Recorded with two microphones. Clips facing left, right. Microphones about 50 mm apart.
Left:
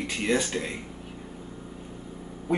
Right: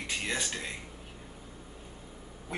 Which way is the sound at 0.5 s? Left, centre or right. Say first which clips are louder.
Left 8 dB; centre.